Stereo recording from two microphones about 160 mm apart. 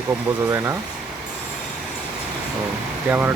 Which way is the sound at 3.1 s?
10° right (ahead or behind).